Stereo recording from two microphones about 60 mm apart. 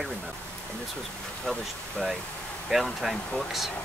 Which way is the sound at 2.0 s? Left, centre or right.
Centre.